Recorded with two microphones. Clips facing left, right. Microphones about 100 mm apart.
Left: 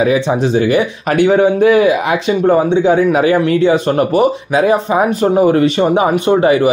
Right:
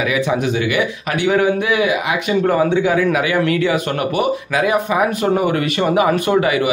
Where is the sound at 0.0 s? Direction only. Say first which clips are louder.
Left 5 dB; 35° left (ahead or behind).